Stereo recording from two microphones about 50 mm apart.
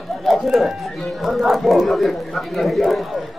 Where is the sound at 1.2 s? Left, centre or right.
Centre.